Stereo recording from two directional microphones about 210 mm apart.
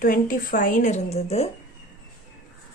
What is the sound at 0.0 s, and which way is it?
Speech, 40° left (ahead or behind).